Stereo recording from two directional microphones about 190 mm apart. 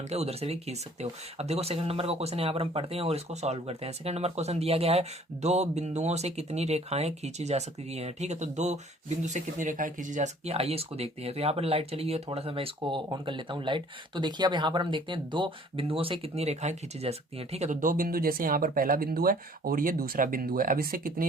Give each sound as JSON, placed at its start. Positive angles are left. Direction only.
{"t": 0.1, "sound": "speech", "side_deg": -35}